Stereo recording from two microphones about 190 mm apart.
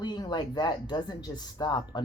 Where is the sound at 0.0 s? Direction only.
25° left (ahead or behind).